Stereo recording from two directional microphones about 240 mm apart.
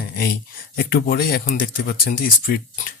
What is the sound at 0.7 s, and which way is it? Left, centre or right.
Speech, left.